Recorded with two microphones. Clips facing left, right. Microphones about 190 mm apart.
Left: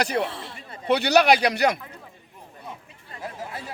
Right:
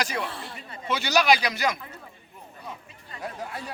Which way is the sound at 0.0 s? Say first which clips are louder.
Left 5 dB; 60° left (ahead or behind).